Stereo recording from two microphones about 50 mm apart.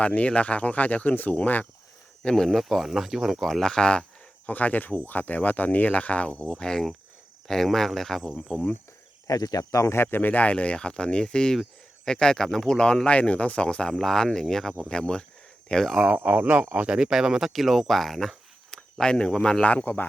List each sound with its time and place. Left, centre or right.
0.0 s speech: left
2.5 s speech: centre
4.4 s speech: left; by 8.3 s centre
9.7 s speech: left
10.0 s speech: left
13.9 s speech: centre
14.8 s speech: centre
16.0 s speech: right
16.7 s speech: right
17.1 s speech: centre
17.5 s speech: centre
19.7 s speech: left